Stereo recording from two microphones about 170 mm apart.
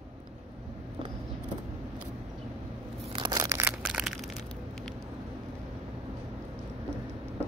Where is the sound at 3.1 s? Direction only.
25° right (ahead or behind).